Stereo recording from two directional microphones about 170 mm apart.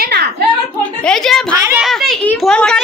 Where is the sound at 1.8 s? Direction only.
Centre (ahead or behind).